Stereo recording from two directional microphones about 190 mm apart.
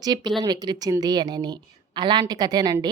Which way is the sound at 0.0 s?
20° right (ahead or behind).